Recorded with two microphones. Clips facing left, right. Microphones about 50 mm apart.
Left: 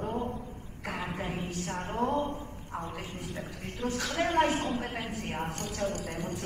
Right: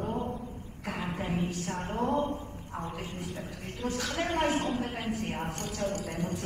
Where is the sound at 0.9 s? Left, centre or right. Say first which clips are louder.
Right 1 dB; left.